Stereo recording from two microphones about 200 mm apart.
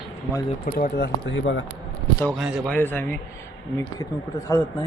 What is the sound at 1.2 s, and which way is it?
Speech, 65° left (ahead or behind).